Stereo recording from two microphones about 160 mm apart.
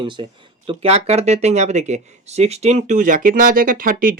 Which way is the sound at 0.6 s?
40° right (ahead or behind).